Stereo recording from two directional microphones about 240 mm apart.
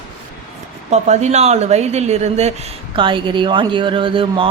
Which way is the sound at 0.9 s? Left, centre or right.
Right.